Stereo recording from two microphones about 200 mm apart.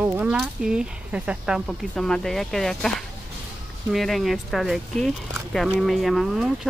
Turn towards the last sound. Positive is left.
turn(degrees=0)  # may be behind; listen again after turning